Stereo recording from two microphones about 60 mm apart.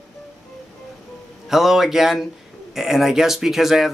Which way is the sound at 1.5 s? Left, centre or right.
Centre.